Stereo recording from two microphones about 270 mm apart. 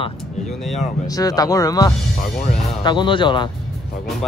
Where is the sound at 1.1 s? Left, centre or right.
Centre.